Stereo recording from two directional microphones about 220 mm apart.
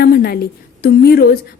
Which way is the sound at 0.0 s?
45° left (ahead or behind).